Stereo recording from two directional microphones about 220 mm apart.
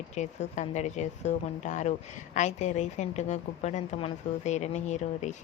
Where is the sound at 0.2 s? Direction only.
30° left (ahead or behind).